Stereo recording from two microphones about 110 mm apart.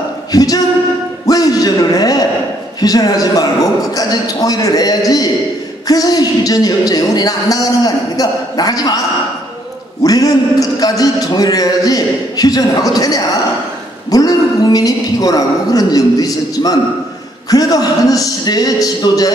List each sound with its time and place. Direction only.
0.3 s a capella: 35° left (ahead or behind)
1.2 s a man's voice: 35° left (ahead or behind)
10.0 s a man's voice: 35° left (ahead or behind)